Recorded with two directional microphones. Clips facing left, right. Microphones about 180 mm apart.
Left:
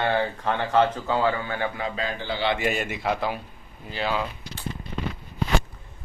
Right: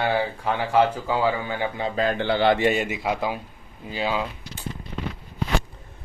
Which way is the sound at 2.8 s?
15° right (ahead or behind).